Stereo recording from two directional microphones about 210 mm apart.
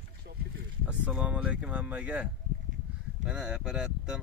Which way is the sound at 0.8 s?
5° right (ahead or behind).